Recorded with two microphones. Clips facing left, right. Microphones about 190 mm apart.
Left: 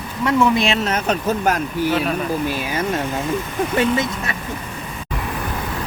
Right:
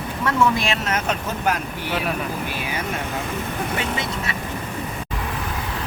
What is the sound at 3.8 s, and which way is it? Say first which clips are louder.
Speech: left 7 dB; 45° left (ahead or behind).